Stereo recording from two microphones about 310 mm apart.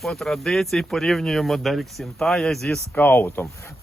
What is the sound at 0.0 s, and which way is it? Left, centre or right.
Speech, centre.